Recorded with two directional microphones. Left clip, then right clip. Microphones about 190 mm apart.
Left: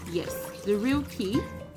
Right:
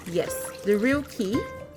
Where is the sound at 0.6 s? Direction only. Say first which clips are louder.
Right 4 dB; 20° right (ahead or behind).